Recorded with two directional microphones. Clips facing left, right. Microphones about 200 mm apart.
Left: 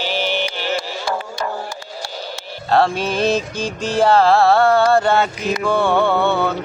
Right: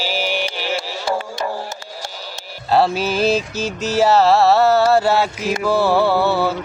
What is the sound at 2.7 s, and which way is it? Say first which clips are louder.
Mantra: even; 5° right (ahead or behind).